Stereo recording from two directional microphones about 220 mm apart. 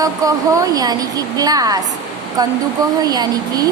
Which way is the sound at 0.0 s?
15° right (ahead or behind).